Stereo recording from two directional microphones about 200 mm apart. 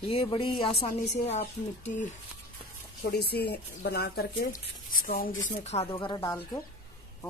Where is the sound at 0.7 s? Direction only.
50° left (ahead or behind).